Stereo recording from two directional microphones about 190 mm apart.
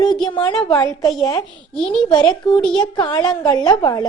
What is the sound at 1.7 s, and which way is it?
Speech, 5° left (ahead or behind).